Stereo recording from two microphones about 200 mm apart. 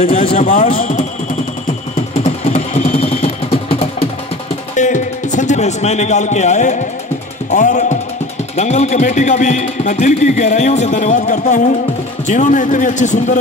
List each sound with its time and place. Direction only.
0.0 s speech: 30° left (ahead or behind)
0.5 s speech: 45° left (ahead or behind)
2.2 s a sound: 35° left (ahead or behind)
4.7 s music: 40° left (ahead or behind)
7.5 s speech: 40° left (ahead or behind)